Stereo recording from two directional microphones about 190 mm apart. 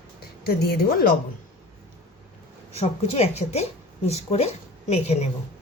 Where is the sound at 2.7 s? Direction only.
35° left (ahead or behind).